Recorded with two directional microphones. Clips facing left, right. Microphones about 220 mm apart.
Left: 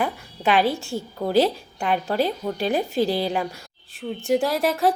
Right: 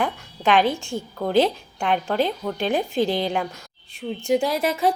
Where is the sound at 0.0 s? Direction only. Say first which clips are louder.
Even; 5° left (ahead or behind).